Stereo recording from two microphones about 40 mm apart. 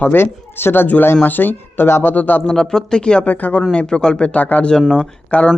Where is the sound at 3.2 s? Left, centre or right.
Left.